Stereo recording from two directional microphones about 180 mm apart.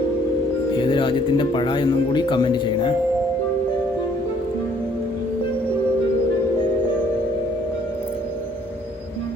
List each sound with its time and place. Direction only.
0.8 s speech: 25° left (ahead or behind)